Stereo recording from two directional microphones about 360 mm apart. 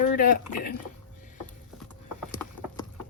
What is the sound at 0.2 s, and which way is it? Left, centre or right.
Speech, left.